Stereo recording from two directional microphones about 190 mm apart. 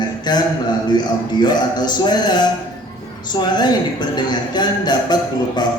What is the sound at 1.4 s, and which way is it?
A man's voice, 20° left (ahead or behind).